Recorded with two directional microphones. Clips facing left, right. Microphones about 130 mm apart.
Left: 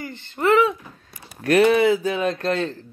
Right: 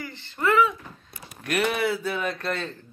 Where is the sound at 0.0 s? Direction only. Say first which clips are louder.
Left 4 dB; 50° left (ahead or behind).